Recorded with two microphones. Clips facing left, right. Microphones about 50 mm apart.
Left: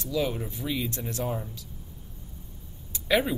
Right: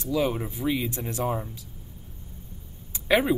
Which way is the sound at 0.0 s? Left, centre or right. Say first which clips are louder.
Right 3 dB; centre.